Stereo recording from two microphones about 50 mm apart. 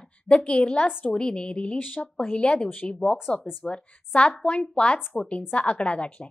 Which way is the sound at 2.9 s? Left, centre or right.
Centre.